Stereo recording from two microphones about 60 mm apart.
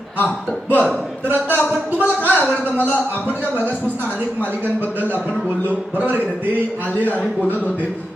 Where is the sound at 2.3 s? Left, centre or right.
Right.